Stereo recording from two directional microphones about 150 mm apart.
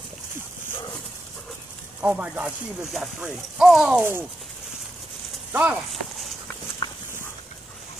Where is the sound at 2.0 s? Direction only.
10° right (ahead or behind).